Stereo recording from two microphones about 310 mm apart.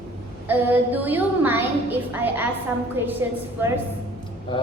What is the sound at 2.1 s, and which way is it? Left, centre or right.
Speech, centre.